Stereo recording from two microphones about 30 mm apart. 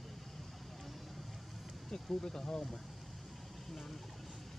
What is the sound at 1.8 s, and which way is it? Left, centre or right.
Speech, left.